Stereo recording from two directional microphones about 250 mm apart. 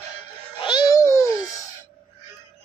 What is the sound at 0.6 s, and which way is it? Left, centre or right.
Babbling, centre.